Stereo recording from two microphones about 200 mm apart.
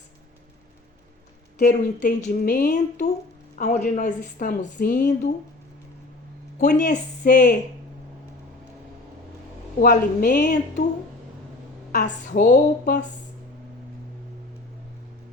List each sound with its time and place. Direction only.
1.5 s a woman's voice: 40° left (ahead or behind)
6.6 s a woman's voice: 40° left (ahead or behind)
9.8 s a woman's voice: 45° left (ahead or behind)
11.9 s speech: 50° left (ahead or behind)